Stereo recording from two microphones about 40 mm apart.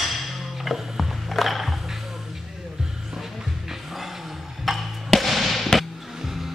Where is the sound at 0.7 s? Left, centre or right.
Centre.